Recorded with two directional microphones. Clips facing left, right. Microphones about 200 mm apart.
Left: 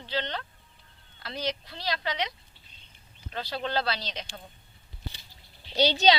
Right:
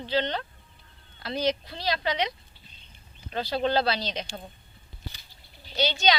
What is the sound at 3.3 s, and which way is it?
Speech, 20° right (ahead or behind).